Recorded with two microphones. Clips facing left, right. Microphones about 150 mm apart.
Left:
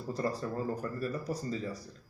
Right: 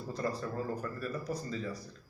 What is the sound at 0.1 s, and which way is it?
A man's voice, 40° left (ahead or behind).